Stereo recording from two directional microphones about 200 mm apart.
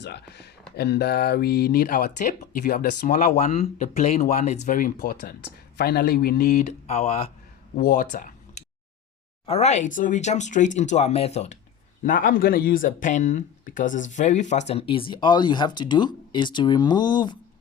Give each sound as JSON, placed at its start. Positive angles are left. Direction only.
{"t": 0.0, "sound": "speech", "side_deg": 55}
{"t": 7.8, "sound": "speech", "side_deg": 45}